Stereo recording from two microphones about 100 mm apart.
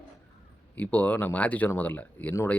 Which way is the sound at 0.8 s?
15° left (ahead or behind).